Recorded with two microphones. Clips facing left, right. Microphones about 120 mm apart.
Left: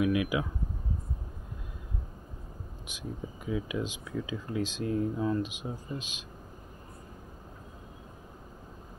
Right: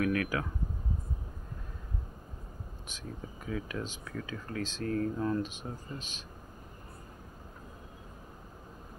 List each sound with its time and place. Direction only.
0.0 s speech: 15° left (ahead or behind)
2.9 s speech: 15° left (ahead or behind)
5.1 s speech: 5° left (ahead or behind)
5.4 s speech: 15° left (ahead or behind)